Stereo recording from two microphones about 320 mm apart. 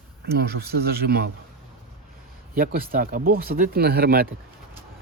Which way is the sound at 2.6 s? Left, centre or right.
Right.